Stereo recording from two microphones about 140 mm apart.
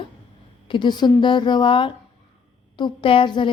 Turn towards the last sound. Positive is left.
turn(degrees=35)  # may be behind; listen again after turning